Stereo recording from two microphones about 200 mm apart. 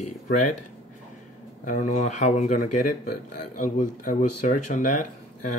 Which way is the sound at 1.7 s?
40° left (ahead or behind).